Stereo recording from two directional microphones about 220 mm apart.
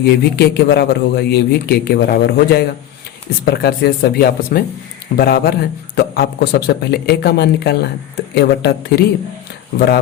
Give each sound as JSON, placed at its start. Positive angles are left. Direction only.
{"t": 0.3, "sound": "a man's voice", "side_deg": 45}